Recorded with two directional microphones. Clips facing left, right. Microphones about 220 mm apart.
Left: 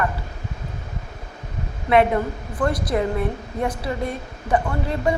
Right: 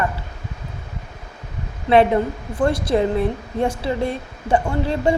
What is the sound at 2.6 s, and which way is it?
A woman's voice, 25° right (ahead or behind).